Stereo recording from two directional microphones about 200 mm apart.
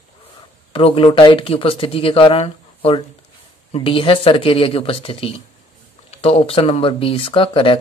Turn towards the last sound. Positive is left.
turn(degrees=25)  # may be behind; listen again after turning